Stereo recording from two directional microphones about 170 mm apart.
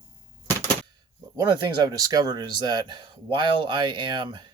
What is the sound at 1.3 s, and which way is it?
Speech, 25° right (ahead or behind).